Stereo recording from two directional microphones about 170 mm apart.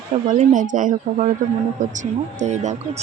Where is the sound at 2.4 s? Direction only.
45° right (ahead or behind).